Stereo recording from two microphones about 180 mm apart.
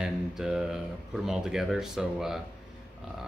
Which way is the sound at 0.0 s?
5° right (ahead or behind).